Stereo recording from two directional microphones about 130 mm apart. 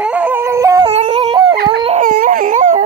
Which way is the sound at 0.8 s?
55° right (ahead or behind).